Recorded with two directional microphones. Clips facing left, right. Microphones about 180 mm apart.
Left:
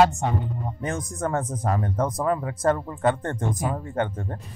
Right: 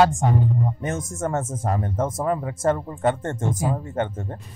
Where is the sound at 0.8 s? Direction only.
25° right (ahead or behind).